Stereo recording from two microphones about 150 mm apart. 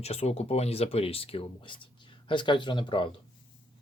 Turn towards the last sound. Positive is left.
turn(degrees=30)  # may be behind; listen again after turning